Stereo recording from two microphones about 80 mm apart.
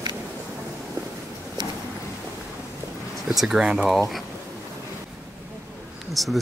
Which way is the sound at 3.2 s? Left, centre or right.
Centre.